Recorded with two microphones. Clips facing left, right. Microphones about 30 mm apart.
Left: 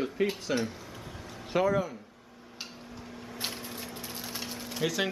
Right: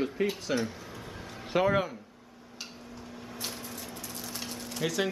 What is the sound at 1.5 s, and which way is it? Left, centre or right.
Speech, centre.